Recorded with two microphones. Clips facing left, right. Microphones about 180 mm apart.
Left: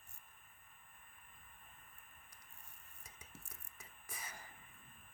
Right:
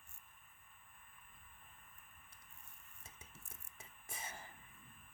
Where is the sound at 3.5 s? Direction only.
25° right (ahead or behind).